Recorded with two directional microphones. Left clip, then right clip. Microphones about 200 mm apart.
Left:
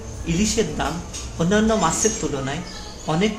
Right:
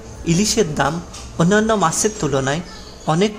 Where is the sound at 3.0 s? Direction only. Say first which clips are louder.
Right 4 dB; 55° right (ahead or behind).